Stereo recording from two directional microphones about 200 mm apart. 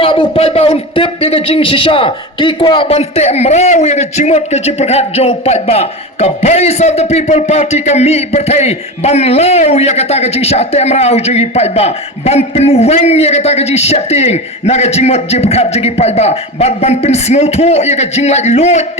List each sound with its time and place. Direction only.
0.0 s a man's voice: 25° left (ahead or behind)